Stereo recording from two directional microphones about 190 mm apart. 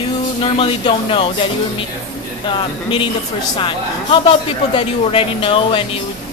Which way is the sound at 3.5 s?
25° left (ahead or behind).